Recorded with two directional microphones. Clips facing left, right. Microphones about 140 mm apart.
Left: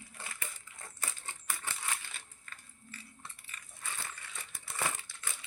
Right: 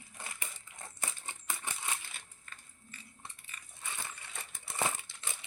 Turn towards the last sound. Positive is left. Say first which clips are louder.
# right 1 dB
turn(degrees=-20)  # may be behind; listen again after turning